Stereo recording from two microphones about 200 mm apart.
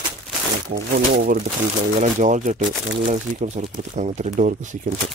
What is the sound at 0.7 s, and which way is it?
Speech, 55° right (ahead or behind).